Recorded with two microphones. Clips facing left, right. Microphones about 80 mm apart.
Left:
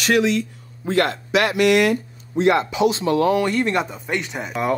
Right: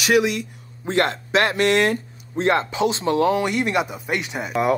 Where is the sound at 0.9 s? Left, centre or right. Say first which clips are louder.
Left 1 dB; right.